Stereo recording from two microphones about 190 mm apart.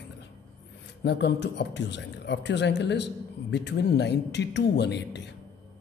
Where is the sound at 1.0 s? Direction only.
65° left (ahead or behind).